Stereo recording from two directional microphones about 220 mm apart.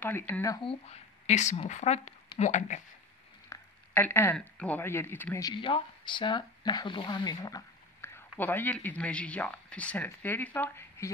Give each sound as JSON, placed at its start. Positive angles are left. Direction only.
{"t": 0.0, "sound": "speech", "side_deg": 10}
{"t": 3.4, "sound": "speech", "side_deg": 10}